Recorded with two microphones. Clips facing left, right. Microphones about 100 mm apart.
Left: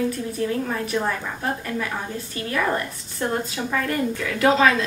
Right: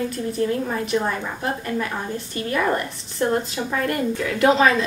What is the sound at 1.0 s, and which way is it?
A woman's voice, 5° right (ahead or behind).